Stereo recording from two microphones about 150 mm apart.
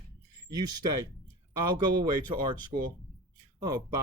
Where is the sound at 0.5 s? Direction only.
25° right (ahead or behind).